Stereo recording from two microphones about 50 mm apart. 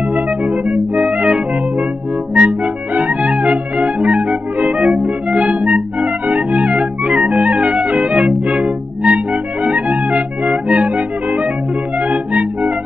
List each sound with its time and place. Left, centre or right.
0.1 s music: right